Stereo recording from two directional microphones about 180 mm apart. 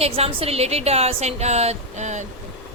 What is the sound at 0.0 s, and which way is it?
A woman's voice, 35° right (ahead or behind).